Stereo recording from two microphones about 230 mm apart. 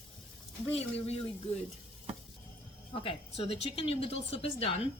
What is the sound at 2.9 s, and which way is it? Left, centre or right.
Speech, left.